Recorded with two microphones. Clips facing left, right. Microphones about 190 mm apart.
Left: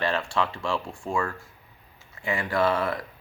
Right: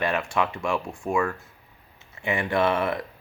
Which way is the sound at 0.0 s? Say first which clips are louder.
Right 1 dB; 15° right (ahead or behind).